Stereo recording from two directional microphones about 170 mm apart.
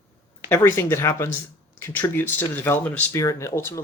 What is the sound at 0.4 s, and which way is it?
Speech, 15° left (ahead or behind).